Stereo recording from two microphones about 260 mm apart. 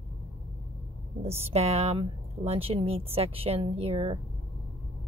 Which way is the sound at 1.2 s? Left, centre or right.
Right.